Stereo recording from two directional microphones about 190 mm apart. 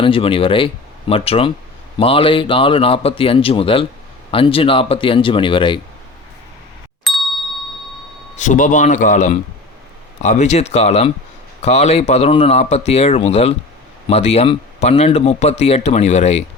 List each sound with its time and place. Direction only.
0.0 s speech: 30° left (ahead or behind)
7.1 s ding: centre (ahead or behind)
8.4 s speech: 40° left (ahead or behind)